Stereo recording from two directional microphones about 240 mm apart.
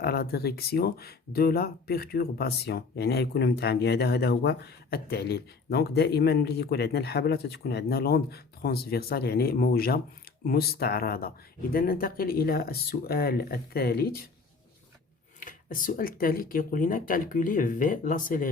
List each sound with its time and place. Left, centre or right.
0.0 s speech: left
15.4 s speech: left